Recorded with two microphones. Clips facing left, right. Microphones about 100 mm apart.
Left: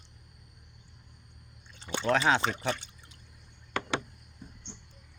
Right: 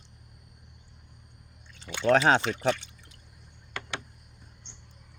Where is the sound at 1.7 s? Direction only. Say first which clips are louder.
Right 5 dB; 35° left (ahead or behind).